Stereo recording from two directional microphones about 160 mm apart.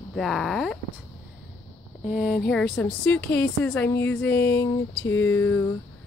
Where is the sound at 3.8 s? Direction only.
15° left (ahead or behind).